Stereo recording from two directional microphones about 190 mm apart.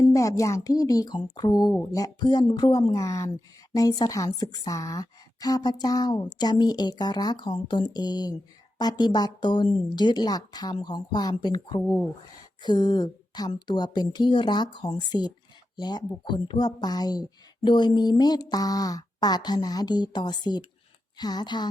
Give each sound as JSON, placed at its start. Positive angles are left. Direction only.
{"t": 0.0, "sound": "a woman's voice", "side_deg": 15}